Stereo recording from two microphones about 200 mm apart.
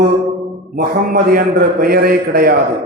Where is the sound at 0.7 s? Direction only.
45° right (ahead or behind).